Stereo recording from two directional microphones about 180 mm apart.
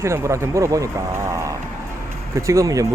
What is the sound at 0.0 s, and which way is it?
Speech, 15° right (ahead or behind).